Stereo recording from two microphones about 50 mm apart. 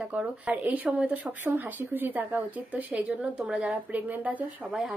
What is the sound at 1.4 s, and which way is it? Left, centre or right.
Speech, right.